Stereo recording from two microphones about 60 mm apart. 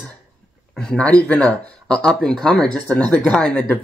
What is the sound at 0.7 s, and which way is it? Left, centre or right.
Speech, centre.